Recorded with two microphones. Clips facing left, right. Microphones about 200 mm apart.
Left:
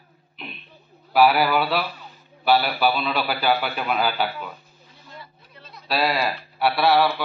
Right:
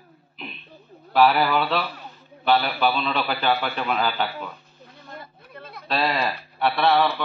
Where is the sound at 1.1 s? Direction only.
10° left (ahead or behind).